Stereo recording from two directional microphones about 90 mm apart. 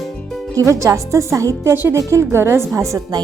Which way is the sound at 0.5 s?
35° right (ahead or behind).